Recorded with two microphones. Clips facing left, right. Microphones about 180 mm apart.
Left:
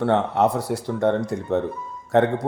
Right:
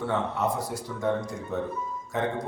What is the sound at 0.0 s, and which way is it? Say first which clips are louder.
A man's voice: left 8 dB; 70° left (ahead or behind).